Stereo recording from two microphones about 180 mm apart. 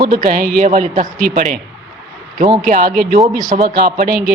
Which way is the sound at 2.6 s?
50° right (ahead or behind).